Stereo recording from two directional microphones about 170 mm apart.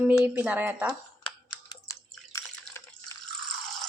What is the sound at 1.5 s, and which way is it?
Drip, 20° left (ahead or behind).